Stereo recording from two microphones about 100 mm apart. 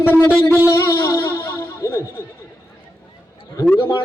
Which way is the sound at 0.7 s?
35° left (ahead or behind).